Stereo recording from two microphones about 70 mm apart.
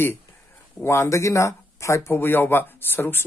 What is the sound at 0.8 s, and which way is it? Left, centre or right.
Speech, left.